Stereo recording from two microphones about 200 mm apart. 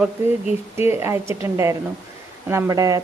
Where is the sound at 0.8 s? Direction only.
10° right (ahead or behind).